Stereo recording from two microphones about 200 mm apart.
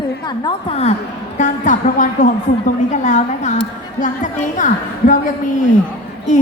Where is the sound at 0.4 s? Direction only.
30° left (ahead or behind).